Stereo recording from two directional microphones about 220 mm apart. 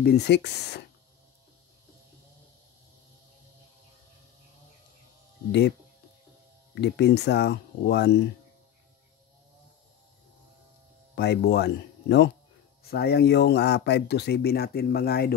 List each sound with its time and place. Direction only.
0.0 s speech: 45° left (ahead or behind)
6.7 s speech: 50° left (ahead or behind)
11.1 s speech: 50° left (ahead or behind)